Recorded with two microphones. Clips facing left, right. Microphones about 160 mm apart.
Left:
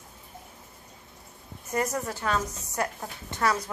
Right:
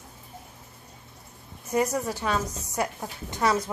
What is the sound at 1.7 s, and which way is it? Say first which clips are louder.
A woman's voice: right 3 dB; 15° right (ahead or behind).